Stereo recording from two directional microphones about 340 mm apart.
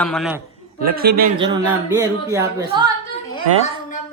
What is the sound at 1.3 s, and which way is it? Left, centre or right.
Speech, centre.